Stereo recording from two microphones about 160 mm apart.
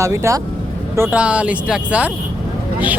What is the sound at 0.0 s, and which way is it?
Speech, 20° right (ahead or behind).